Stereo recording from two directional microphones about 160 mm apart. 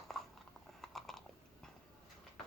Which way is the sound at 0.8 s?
Centre (ahead or behind).